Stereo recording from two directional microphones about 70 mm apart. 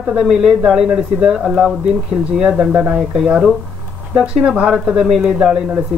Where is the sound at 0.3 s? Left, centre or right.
Centre.